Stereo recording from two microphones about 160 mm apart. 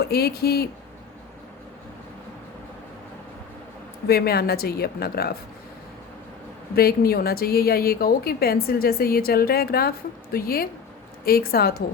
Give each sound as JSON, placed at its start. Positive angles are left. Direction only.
{"t": 0.0, "sound": "speech", "side_deg": 80}
{"t": 4.0, "sound": "a woman's voice", "side_deg": 80}
{"t": 6.7, "sound": "a woman's voice", "side_deg": 70}